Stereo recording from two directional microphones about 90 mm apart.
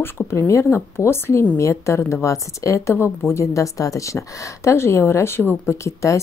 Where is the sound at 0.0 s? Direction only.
30° left (ahead or behind).